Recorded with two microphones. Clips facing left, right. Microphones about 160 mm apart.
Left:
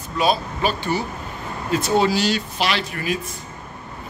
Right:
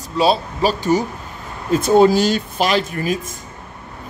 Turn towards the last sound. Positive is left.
turn(degrees=-40)  # may be behind; listen again after turning